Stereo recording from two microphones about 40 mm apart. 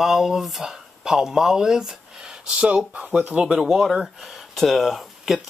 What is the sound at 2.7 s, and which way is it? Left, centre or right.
Speech, right.